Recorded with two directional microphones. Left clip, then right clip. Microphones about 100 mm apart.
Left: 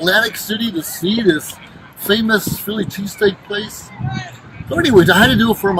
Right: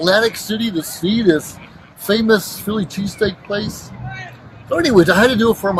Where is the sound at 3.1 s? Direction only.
45° right (ahead or behind).